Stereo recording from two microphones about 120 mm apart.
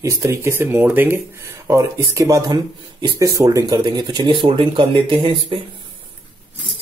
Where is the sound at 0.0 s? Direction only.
25° right (ahead or behind).